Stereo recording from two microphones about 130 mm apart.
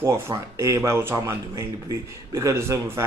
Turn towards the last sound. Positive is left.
turn(degrees=-20)  # may be behind; listen again after turning